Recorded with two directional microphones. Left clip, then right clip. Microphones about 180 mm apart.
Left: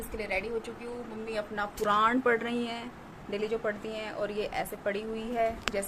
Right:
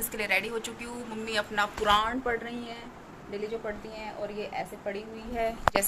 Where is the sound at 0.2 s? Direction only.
5° left (ahead or behind).